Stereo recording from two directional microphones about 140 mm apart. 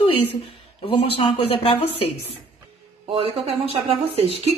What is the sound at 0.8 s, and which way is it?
Speech, 40° left (ahead or behind).